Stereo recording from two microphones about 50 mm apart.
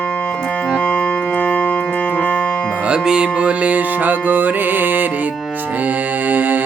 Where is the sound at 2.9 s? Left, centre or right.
Centre; by 5.0 s right.